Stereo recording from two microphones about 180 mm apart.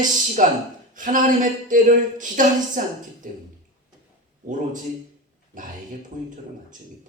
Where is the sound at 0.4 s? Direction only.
45° right (ahead or behind).